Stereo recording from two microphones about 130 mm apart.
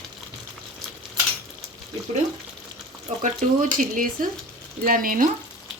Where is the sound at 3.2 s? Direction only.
90° right.